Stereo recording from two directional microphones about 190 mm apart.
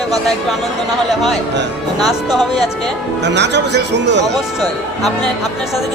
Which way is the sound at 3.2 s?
65° right (ahead or behind).